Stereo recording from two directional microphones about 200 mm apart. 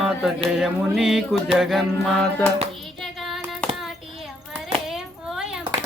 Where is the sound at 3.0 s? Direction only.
Centre (ahead or behind).